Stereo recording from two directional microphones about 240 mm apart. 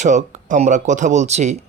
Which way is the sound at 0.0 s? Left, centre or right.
Right.